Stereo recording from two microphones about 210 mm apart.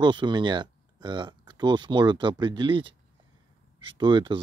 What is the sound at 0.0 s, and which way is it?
Speech, 20° right (ahead or behind).